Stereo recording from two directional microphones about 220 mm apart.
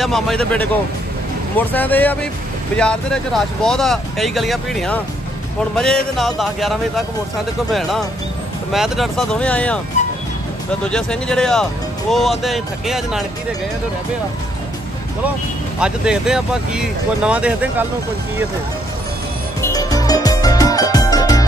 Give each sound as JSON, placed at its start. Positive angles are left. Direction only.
{"t": 0.0, "sound": "speech", "side_deg": 0}
{"t": 8.7, "sound": "speech", "side_deg": 0}
{"t": 10.8, "sound": "speech", "side_deg": 5}
{"t": 15.8, "sound": "speech", "side_deg": -5}
{"t": 19.6, "sound": "music", "side_deg": 15}